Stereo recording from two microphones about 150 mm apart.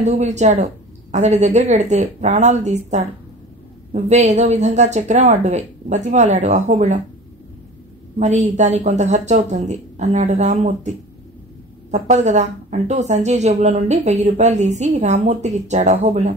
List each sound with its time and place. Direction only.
0.0 s a woman's voice: 50° right (ahead or behind)
8.2 s a woman's voice: 50° right (ahead or behind)
11.9 s a woman's voice: 50° right (ahead or behind)